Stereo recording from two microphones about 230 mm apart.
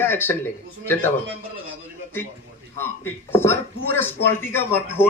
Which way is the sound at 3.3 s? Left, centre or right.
Centre.